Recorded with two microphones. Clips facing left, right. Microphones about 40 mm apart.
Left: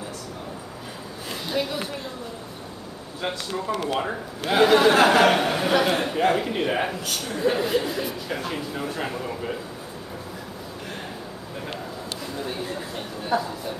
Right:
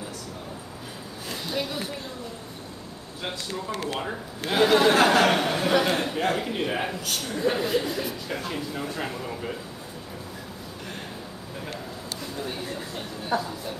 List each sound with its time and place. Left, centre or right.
1.5 s speech: centre
3.2 s speech: centre
3.7 s speech: left
4.5 s speech: centre
12.4 s a sound: centre